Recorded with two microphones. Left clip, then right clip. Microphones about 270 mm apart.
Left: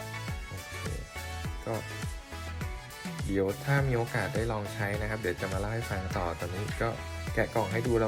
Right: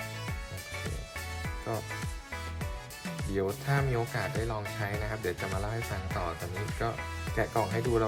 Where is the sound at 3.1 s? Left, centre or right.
Centre.